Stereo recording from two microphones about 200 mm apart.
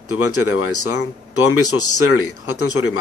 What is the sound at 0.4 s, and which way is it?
Speech, 90° left.